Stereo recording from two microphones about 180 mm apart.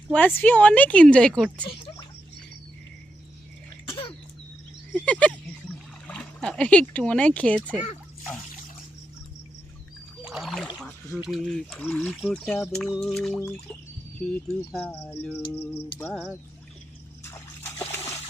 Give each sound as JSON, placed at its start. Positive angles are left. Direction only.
{"t": 0.1, "sound": "speech", "side_deg": 10}
{"t": 1.6, "sound": "a sound", "side_deg": 25}
{"t": 4.9, "sound": "speech", "side_deg": 5}
{"t": 10.2, "sound": "a sound", "side_deg": 0}
{"t": 11.2, "sound": "speech", "side_deg": 0}
{"t": 14.7, "sound": "speech", "side_deg": 0}
{"t": 15.1, "sound": "speech", "side_deg": 10}
{"t": 17.2, "sound": "splash", "side_deg": 15}